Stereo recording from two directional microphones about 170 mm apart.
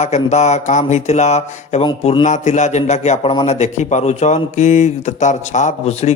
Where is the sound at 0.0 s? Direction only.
45° left (ahead or behind).